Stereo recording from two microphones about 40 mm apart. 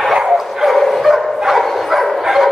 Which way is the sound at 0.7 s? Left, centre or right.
Centre.